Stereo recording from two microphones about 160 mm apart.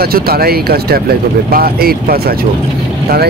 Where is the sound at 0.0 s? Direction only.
70° right (ahead or behind).